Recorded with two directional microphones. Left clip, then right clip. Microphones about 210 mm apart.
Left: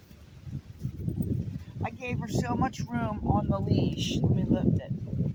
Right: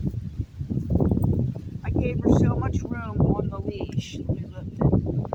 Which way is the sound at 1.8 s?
30° left (ahead or behind).